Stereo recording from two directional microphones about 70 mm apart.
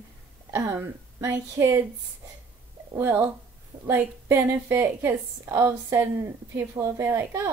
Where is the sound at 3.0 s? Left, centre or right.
Right.